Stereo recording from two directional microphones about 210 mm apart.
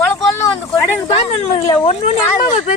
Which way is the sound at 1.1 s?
30° left (ahead or behind).